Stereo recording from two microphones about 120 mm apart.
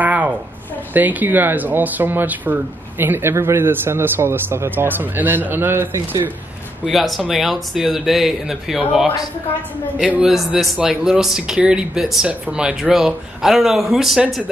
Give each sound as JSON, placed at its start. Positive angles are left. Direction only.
{"t": 0.0, "sound": "a sound", "side_deg": -15}
{"t": 0.9, "sound": "speech", "side_deg": -15}
{"t": 6.9, "sound": "speech", "side_deg": 0}